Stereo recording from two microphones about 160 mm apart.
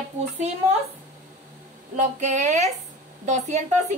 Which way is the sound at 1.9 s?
45° right (ahead or behind).